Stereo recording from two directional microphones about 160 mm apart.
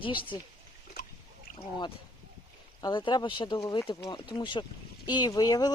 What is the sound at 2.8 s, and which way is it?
Speech, 30° left (ahead or behind).